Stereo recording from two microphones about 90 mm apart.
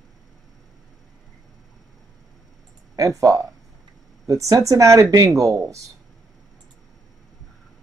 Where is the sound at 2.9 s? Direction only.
40° right (ahead or behind).